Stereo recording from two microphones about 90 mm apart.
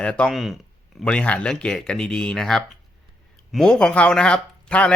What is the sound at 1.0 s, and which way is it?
Speech, 15° left (ahead or behind).